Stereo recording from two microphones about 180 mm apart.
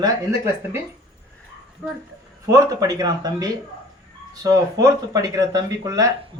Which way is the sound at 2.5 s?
20° right (ahead or behind).